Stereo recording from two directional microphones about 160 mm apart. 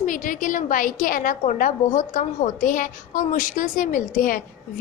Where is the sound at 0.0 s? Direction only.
55° left (ahead or behind).